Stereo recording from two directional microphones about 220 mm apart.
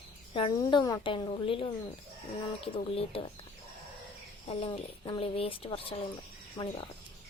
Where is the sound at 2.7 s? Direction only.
25° left (ahead or behind).